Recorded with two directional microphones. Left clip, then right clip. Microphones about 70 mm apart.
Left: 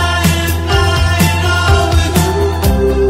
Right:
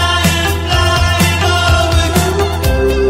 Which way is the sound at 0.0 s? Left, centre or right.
Right.